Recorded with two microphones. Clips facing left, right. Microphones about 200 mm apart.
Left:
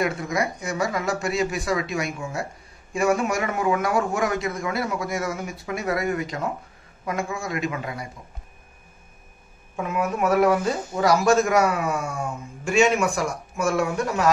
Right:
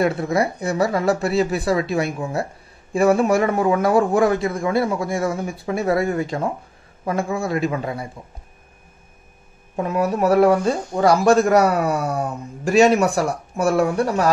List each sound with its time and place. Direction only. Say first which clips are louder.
0.0 s a man's voice: right 5 dB; 30° right (ahead or behind)
9.8 s a man's voice: right 5 dB; 35° right (ahead or behind)